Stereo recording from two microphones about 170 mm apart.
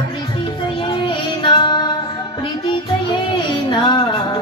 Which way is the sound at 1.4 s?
25° left (ahead or behind).